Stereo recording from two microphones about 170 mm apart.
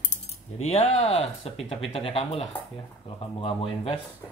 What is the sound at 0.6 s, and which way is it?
Speech, 40° left (ahead or behind).